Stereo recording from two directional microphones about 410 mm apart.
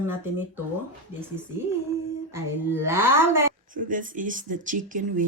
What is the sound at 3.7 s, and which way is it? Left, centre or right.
Speech, centre.